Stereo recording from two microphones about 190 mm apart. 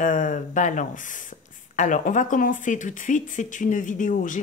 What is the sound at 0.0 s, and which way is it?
Speech, 40° left (ahead or behind).